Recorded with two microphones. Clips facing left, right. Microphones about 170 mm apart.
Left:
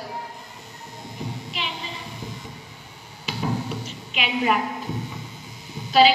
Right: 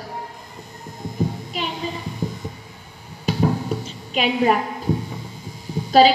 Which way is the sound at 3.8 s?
40° right (ahead or behind).